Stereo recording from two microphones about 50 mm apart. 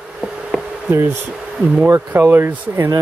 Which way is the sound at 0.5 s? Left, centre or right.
Centre.